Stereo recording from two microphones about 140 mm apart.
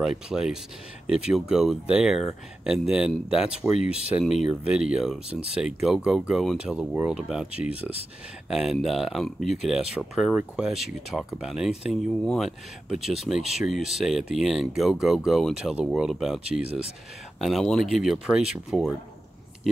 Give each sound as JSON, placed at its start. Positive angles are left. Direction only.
{"t": 0.3, "sound": "speech", "side_deg": -5}
{"t": 5.3, "sound": "speech", "side_deg": -45}
{"t": 5.6, "sound": "speech", "side_deg": -5}